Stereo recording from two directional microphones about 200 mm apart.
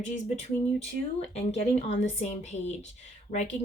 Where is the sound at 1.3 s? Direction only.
30° left (ahead or behind).